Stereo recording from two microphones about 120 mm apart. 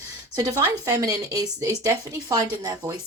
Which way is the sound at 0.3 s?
30° right (ahead or behind).